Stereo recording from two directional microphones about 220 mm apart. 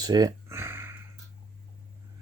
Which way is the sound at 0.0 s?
15° right (ahead or behind).